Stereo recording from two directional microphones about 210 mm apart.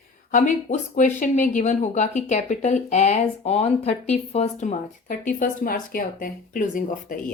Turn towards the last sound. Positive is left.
turn(degrees=40)  # may be behind; listen again after turning